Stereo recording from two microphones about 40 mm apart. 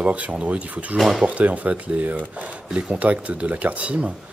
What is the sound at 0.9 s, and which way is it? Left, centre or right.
Speech, centre.